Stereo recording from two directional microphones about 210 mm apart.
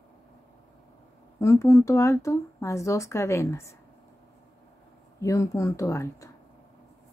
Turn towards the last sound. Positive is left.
turn(degrees=15)  # may be behind; listen again after turning